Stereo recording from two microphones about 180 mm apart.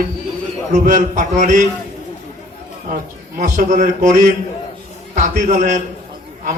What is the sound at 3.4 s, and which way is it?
A man's voice, 45° right (ahead or behind).